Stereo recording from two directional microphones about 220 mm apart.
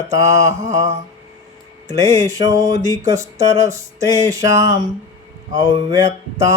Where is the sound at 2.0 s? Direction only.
30° right (ahead or behind).